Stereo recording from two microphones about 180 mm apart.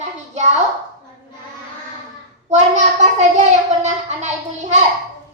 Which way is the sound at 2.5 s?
40° right (ahead or behind).